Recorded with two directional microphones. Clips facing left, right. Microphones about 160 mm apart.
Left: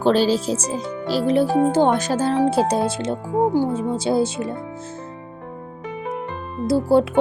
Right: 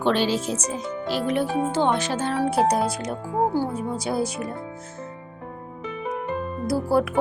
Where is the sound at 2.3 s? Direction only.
25° left (ahead or behind).